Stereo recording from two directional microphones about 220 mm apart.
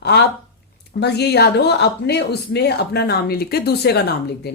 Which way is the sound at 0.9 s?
50° left (ahead or behind).